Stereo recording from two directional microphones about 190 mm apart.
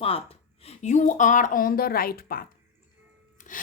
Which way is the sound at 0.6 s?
35° left (ahead or behind).